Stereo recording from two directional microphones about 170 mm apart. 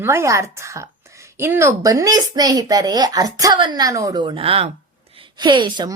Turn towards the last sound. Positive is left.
turn(degrees=-25)  # may be behind; listen again after turning